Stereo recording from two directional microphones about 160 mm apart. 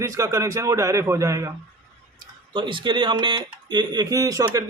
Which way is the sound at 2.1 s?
30° right (ahead or behind).